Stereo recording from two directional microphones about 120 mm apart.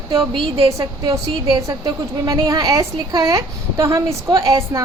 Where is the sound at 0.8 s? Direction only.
25° right (ahead or behind).